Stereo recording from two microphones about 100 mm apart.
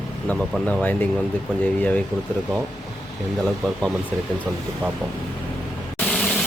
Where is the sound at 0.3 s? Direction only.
15° left (ahead or behind).